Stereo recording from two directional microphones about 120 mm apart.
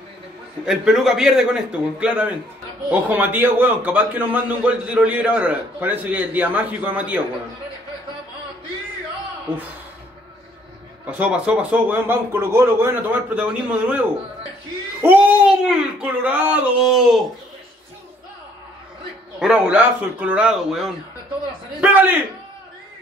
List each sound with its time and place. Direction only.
0.7 s a man's voice: 5° right (ahead or behind)
11.1 s a man's voice: 10° right (ahead or behind)
15.0 s a sound: 15° right (ahead or behind)
16.0 s a man's voice: 15° right (ahead or behind)
19.4 s a man's voice: 10° right (ahead or behind)